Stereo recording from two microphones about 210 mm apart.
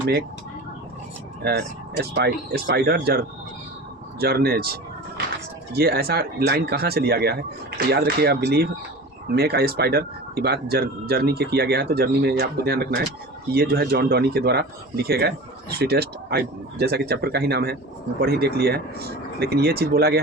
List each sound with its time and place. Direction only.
1.5 s speech: 50° right (ahead or behind)
4.2 s speech: 50° right (ahead or behind)
5.7 s speech: 50° right (ahead or behind)